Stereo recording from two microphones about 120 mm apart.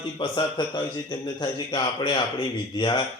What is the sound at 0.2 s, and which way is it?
Speech, 40° left (ahead or behind).